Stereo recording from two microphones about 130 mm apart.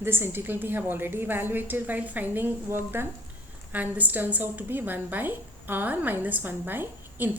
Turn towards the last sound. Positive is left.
turn(degrees=-15)  # may be behind; listen again after turning